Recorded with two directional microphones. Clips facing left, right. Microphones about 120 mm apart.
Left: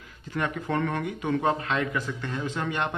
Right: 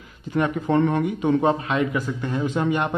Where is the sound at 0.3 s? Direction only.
20° right (ahead or behind).